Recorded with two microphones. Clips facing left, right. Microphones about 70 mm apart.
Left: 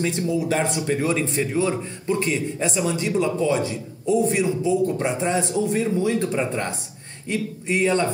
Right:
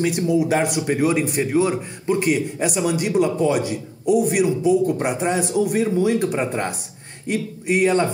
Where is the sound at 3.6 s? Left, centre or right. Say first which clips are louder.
Right 3 dB; left.